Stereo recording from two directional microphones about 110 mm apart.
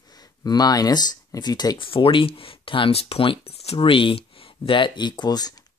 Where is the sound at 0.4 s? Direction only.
35° left (ahead or behind).